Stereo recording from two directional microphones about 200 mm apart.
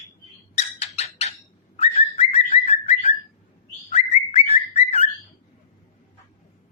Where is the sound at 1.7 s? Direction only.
30° left (ahead or behind).